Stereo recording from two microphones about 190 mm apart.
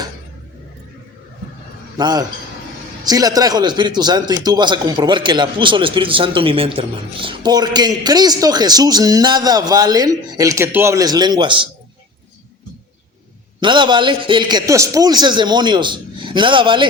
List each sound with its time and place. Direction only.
2.0 s a man's voice: 20° right (ahead or behind)
13.6 s a man's voice: 25° right (ahead or behind)